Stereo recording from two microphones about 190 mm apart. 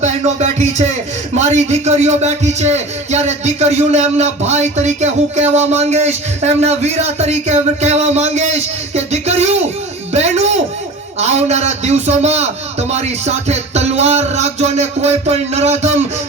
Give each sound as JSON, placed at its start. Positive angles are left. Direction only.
{"t": 0.0, "sound": "speech", "side_deg": -35}
{"t": 10.1, "sound": "a sound", "side_deg": -35}
{"t": 11.2, "sound": "speech", "side_deg": -35}